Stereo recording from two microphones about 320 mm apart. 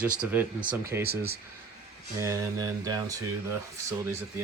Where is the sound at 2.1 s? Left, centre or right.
Centre.